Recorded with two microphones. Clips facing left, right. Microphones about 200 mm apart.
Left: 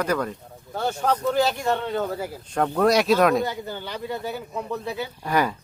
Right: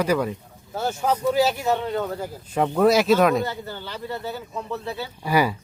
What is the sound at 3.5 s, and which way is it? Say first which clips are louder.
Speech: left 1 dB; 15° left (ahead or behind).